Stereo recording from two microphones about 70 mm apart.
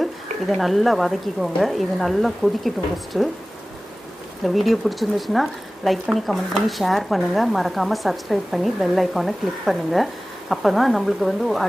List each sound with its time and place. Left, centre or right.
0.6 s speech: centre
4.5 s speech: centre